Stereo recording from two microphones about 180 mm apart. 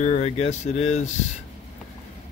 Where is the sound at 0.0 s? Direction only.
40° left (ahead or behind).